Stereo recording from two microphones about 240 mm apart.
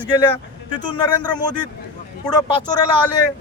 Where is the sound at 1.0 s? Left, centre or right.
Centre.